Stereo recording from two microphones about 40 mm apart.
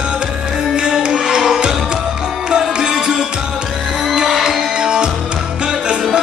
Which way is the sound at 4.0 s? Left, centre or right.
Centre.